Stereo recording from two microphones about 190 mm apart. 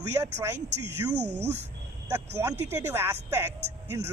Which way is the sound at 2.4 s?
10° right (ahead or behind).